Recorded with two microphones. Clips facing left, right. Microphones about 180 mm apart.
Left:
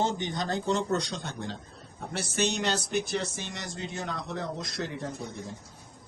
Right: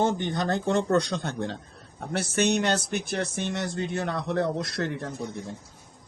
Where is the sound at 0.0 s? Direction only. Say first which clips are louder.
Right 4 dB; 55° right (ahead or behind).